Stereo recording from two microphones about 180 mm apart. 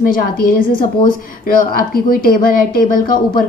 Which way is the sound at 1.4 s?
55° left (ahead or behind).